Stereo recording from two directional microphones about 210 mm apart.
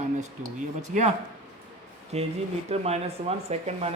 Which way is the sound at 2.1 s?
30° right (ahead or behind).